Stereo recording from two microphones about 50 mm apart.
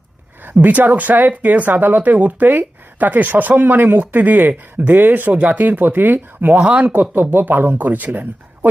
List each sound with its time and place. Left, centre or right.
0.4 s speech: right